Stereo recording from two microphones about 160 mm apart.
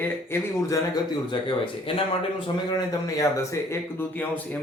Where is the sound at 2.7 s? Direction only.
20° left (ahead or behind).